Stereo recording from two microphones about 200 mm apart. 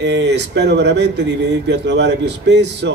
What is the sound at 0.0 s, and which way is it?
Speech, 60° right (ahead or behind).